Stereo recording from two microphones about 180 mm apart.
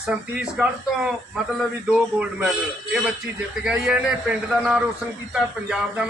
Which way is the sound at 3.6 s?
5° right (ahead or behind).